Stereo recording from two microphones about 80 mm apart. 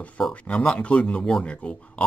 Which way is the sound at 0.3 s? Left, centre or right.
Centre.